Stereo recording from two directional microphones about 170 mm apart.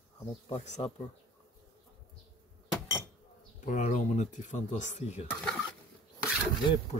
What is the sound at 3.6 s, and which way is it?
Speech, 45° left (ahead or behind).